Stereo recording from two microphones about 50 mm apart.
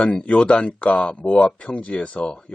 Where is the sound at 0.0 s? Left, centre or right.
Left.